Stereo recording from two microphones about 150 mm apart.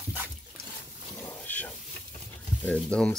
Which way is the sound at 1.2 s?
10° left (ahead or behind).